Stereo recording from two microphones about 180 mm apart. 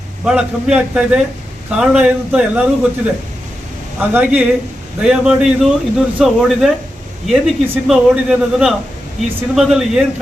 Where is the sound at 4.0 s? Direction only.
10° right (ahead or behind).